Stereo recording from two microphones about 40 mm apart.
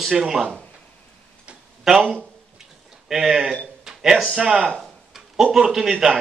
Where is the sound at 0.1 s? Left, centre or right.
Centre.